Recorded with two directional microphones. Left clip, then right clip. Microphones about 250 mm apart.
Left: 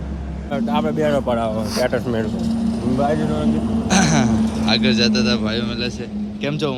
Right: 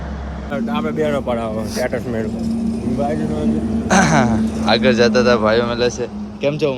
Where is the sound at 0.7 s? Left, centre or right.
Left.